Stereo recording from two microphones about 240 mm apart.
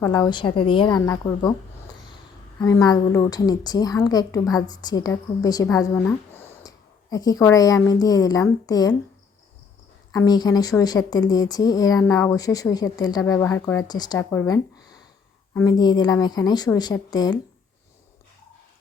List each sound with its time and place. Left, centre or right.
0.0 s speech: centre
2.6 s speech: centre
10.1 s speech: centre